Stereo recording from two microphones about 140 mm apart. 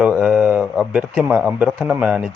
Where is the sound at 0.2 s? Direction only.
10° right (ahead or behind).